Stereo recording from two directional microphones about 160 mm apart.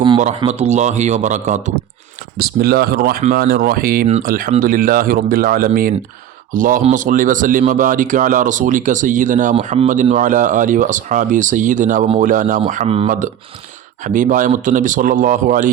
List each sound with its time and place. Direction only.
0.2 s speech: 45° right (ahead or behind)
2.4 s a man's voice: 75° right (ahead or behind); by 15.7 s 55° right (ahead or behind)